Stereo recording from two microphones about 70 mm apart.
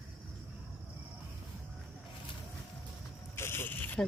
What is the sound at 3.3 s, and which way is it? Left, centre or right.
Zipper, left.